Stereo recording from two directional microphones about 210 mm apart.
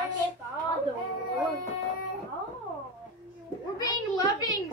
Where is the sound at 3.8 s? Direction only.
15° left (ahead or behind).